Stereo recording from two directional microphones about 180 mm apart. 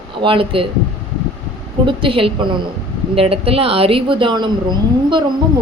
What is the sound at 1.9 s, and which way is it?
A woman's voice, 30° right (ahead or behind).